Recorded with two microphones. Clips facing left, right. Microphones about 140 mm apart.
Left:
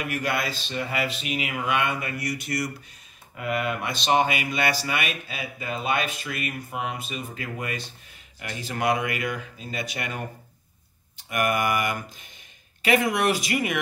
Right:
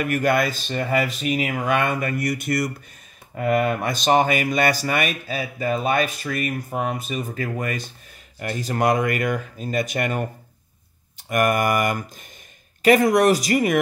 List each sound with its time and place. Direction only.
0.0 s speech: 50° right (ahead or behind)
11.2 s speech: 45° right (ahead or behind)